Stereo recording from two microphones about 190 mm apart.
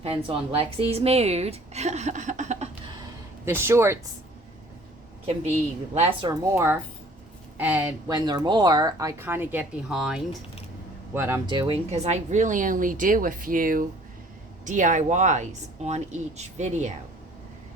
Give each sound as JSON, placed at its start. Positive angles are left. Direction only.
{"t": 0.0, "sound": "a woman's voice", "side_deg": -30}
{"t": 3.4, "sound": "speech", "side_deg": -15}
{"t": 5.9, "sound": "speech", "side_deg": -30}
{"t": 11.4, "sound": "a woman's voice", "side_deg": -25}